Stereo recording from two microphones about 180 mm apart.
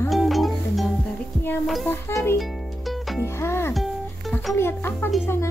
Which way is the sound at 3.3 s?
15° left (ahead or behind).